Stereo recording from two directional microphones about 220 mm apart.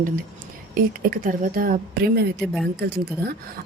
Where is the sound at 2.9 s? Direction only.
45° right (ahead or behind).